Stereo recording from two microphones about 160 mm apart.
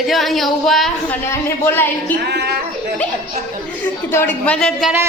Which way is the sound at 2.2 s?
90° right.